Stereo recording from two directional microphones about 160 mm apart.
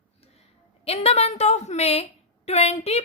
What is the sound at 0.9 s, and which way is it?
A woman's voice, 40° left (ahead or behind).